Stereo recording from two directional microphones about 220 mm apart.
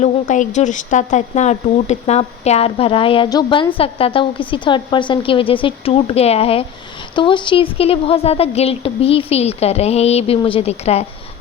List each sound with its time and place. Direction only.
0.0 s speech: 35° left (ahead or behind)